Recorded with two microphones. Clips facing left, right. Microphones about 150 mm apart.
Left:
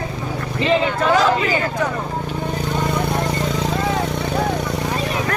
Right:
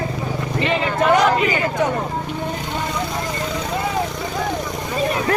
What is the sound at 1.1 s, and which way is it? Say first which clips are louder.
Speech: even; 20° right (ahead or behind).